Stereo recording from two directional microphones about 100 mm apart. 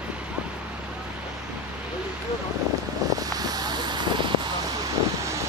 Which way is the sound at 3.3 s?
40° right (ahead or behind).